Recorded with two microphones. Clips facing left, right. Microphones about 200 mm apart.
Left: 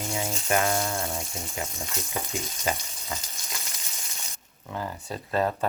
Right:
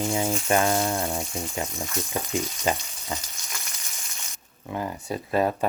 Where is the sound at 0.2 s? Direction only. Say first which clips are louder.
Right 1 dB; 30° right (ahead or behind).